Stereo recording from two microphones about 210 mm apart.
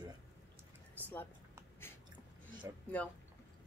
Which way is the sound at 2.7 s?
15° right (ahead or behind).